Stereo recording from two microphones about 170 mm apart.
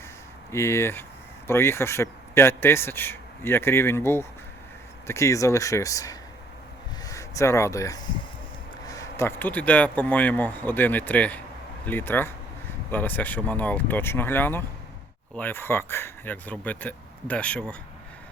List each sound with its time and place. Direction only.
0.5 s a man's voice: 15° left (ahead or behind)